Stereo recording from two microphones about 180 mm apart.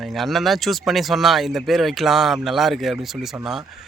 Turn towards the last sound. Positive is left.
turn(degrees=0)  # may be behind; listen again after turning